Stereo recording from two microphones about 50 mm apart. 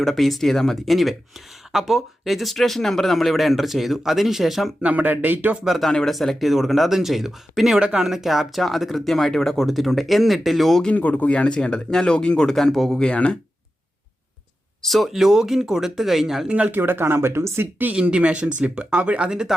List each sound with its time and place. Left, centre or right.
0.0 s speech: centre
4.8 s speech: right
5.6 s speech: centre
7.8 s speech: centre
8.0 s speech: centre
10.9 s speech: left; by 13.0 s centre
13.0 s speech: left
14.8 s speech: centre
16.6 s speech: right
18.0 s speech: right